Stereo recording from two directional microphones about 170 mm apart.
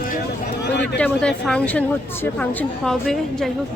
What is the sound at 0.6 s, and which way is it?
Speech, 85° left.